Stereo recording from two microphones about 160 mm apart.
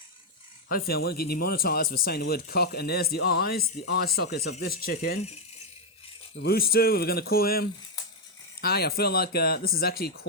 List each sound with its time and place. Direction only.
0.7 s speech: 70° left (ahead or behind)
6.4 s speech: 75° left (ahead or behind)